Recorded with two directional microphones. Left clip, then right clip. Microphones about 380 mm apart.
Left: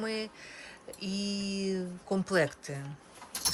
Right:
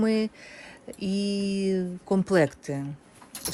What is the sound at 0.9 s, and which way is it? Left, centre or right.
Mantra, centre.